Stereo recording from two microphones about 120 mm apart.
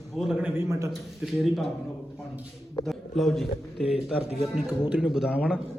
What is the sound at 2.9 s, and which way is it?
A man's voice, centre (ahead or behind).